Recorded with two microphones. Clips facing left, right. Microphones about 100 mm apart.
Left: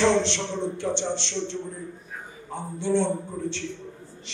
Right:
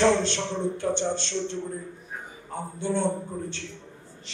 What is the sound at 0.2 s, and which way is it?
A man's voice, 45° right (ahead or behind).